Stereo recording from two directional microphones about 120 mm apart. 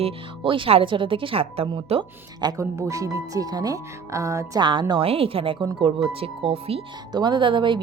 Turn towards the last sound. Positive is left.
turn(degrees=-40)  # may be behind; listen again after turning